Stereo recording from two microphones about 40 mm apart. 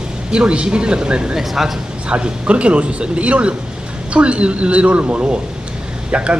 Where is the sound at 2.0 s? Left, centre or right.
Right.